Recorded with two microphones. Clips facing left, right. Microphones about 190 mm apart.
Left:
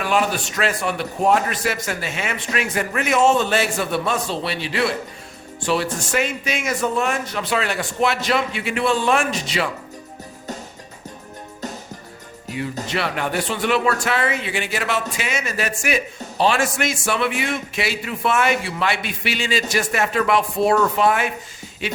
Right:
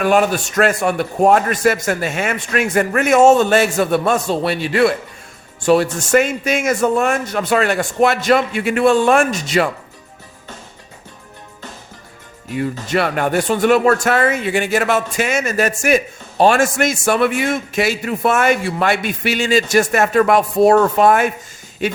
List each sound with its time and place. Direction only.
0.0 s a man's voice: 50° right (ahead or behind)
12.9 s a man's voice: 50° right (ahead or behind)
21.8 s a sound: 45° right (ahead or behind)